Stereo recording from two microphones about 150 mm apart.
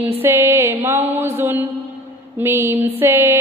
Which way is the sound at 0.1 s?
15° right (ahead or behind).